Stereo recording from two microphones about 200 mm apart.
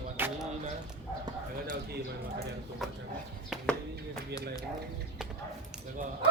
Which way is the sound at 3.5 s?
5° left (ahead or behind).